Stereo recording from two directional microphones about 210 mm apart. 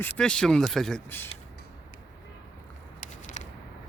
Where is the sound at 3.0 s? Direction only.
35° left (ahead or behind).